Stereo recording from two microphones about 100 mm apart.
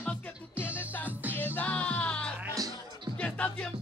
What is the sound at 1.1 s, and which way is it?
Music, 15° right (ahead or behind).